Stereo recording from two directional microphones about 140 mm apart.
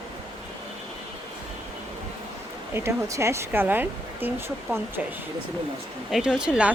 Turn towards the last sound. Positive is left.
turn(degrees=-5)  # may be behind; listen again after turning